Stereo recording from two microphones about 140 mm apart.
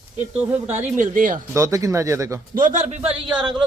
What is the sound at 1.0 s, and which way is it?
Speech, 70° right (ahead or behind).